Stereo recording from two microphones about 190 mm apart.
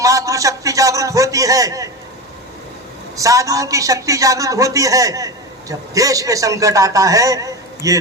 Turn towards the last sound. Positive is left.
turn(degrees=-15)  # may be behind; listen again after turning